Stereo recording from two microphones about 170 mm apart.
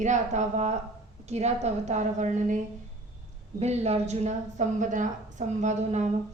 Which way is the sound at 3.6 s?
40° right (ahead or behind).